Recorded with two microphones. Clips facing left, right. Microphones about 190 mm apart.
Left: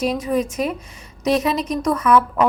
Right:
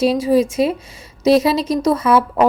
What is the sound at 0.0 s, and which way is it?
A woman's voice, 30° right (ahead or behind).